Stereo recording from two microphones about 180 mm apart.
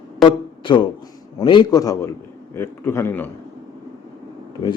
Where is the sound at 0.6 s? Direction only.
25° left (ahead or behind); by 3.2 s 10° left (ahead or behind).